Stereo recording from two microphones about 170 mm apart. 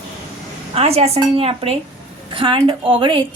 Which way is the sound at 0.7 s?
35° right (ahead or behind).